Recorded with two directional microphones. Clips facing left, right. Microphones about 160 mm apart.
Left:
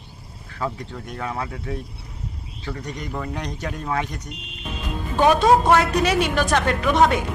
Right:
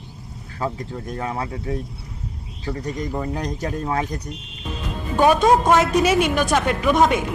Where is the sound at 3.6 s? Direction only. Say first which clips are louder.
Right 2 dB; 25° right (ahead or behind).